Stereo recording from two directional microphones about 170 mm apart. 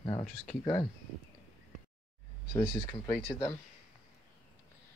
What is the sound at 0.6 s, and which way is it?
Speech, 25° left (ahead or behind).